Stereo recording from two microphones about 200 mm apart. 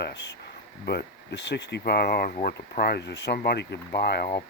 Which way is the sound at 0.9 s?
55° left (ahead or behind).